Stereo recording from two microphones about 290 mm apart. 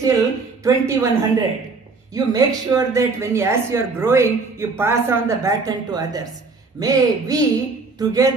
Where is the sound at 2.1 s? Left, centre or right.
Centre.